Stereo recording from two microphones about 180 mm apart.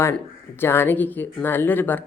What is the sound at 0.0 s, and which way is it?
Speech, 10° left (ahead or behind).